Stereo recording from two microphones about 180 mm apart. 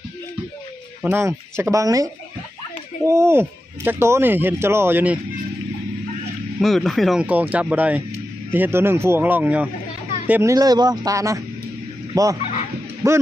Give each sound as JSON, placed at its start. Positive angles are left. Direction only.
{"t": 1.1, "sound": "speech", "side_deg": -15}
{"t": 3.1, "sound": "speech", "side_deg": -15}
{"t": 6.6, "sound": "a man's voice", "side_deg": 0}